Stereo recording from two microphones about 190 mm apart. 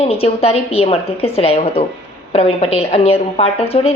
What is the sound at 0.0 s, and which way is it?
A woman's voice, 30° left (ahead or behind).